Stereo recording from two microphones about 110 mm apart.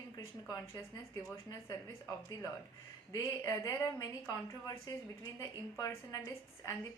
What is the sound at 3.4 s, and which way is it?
A woman's voice, 25° left (ahead or behind).